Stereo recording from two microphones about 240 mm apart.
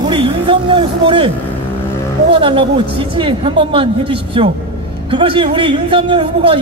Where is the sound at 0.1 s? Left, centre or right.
Right.